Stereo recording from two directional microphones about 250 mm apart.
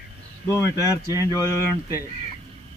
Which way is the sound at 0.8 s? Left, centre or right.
Centre.